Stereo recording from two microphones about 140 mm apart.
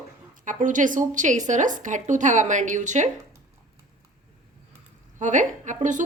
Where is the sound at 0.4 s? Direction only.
65° right (ahead or behind).